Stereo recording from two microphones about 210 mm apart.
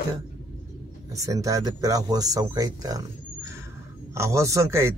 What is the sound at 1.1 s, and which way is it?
A man's voice, 15° right (ahead or behind).